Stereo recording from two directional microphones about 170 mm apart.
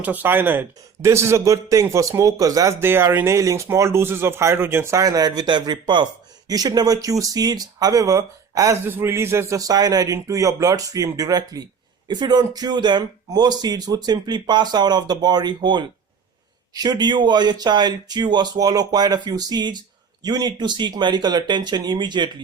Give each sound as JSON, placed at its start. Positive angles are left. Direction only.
{"t": 0.0, "sound": "a man's voice", "side_deg": -10}